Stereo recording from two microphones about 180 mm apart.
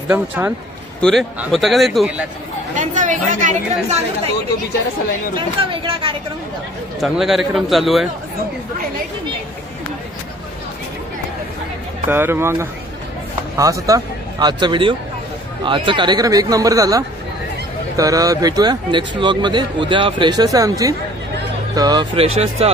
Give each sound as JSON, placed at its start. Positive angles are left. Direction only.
{"t": 1.4, "sound": "a man's voice", "side_deg": 0}
{"t": 2.7, "sound": "a woman's voice", "side_deg": -45}
{"t": 5.3, "sound": "speech", "side_deg": -30}
{"t": 7.0, "sound": "a man's voice", "side_deg": 0}
{"t": 12.1, "sound": "speech", "side_deg": -15}